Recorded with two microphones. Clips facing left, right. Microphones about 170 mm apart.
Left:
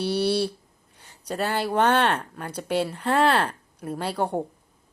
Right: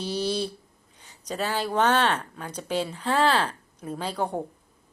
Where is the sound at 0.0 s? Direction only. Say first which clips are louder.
Left 4 dB; 65° left (ahead or behind).